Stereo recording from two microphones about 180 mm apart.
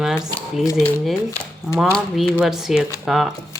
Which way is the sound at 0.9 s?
10° left (ahead or behind).